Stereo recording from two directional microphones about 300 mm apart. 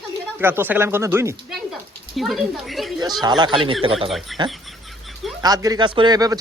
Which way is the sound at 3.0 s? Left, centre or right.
Centre.